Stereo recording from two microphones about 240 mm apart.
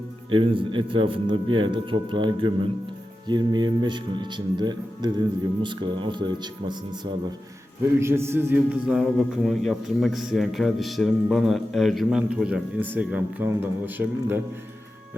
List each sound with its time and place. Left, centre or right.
0.3 s a man's voice: right